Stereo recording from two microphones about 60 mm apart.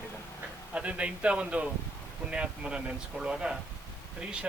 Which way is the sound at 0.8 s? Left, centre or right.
Centre.